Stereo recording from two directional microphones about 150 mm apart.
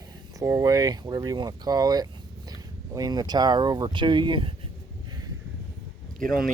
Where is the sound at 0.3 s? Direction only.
20° right (ahead or behind).